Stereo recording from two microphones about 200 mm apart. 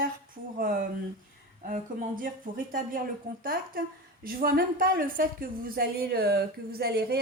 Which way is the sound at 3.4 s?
45° right (ahead or behind).